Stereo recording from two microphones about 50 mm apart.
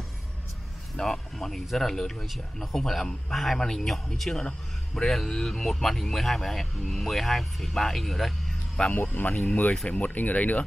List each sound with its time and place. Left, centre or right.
0.9 s a man's voice: centre
8.9 s speech: left